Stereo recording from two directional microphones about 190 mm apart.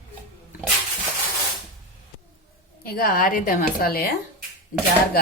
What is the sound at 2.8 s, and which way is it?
A woman's voice, 50° left (ahead or behind).